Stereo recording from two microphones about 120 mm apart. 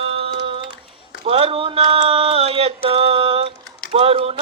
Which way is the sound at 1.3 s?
55° right (ahead or behind).